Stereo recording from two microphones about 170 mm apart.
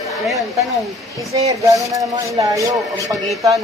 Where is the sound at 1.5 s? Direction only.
20° right (ahead or behind).